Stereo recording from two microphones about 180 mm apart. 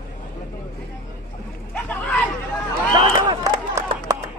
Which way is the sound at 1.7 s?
5° left (ahead or behind).